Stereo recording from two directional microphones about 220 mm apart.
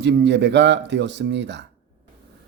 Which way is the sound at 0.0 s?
50° right (ahead or behind).